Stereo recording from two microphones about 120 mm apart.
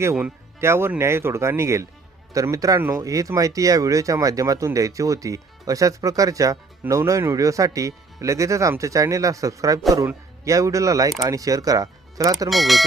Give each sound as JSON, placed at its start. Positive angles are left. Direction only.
{"t": 0.6, "sound": "speech", "side_deg": -20}
{"t": 12.5, "sound": "speech", "side_deg": 0}